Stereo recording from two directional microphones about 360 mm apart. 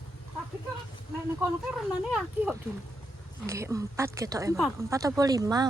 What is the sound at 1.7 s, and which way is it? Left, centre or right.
Speech, centre.